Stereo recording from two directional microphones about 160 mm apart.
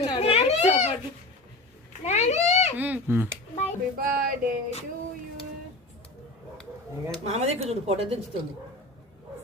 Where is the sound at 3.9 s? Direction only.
65° right (ahead or behind).